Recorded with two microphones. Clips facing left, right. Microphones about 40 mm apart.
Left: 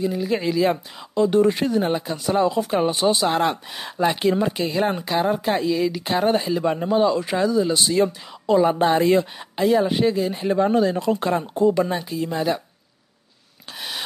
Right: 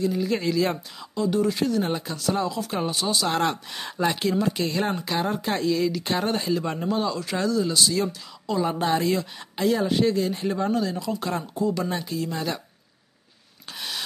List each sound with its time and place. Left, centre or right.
0.0 s speech: centre
1.1 s speech: left
3.3 s speech: centre
4.6 s speech: centre; by 9.3 s left
9.6 s speech: centre
10.6 s speech: left
11.8 s speech: centre
13.7 s a sound: centre